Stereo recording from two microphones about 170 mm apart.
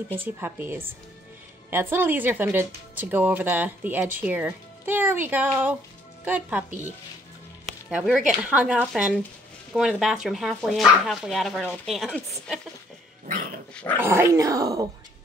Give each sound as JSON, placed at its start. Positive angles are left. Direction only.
{"t": 0.2, "sound": "speech", "side_deg": -10}
{"t": 7.9, "sound": "speech", "side_deg": 0}
{"t": 13.3, "sound": "dog", "side_deg": -55}
{"t": 13.9, "sound": "speech", "side_deg": -15}